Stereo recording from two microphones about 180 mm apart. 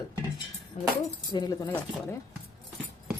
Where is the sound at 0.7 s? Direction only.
40° left (ahead or behind).